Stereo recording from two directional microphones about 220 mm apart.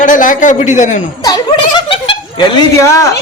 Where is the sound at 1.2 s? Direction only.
15° left (ahead or behind).